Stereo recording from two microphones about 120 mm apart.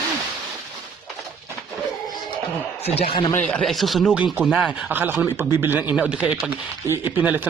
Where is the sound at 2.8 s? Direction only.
60° left (ahead or behind).